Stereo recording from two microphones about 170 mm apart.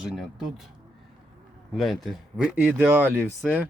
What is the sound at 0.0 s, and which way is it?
Speech, 5° right (ahead or behind).